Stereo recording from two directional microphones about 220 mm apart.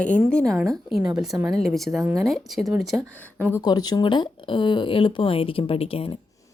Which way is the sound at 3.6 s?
20° left (ahead or behind).